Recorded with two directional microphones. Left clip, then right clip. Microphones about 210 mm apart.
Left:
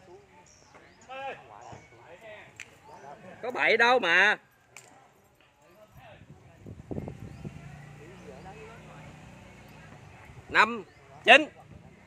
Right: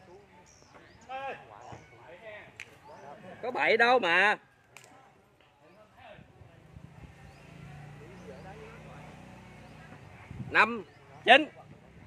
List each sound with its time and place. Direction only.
1.0 s a sound: 10° right (ahead or behind)
3.3 s speech: 5° left (ahead or behind)
10.5 s speech: 10° left (ahead or behind)
11.2 s speech: 25° left (ahead or behind)